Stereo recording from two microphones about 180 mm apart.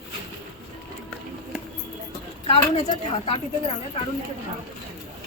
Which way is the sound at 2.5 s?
35° left (ahead or behind).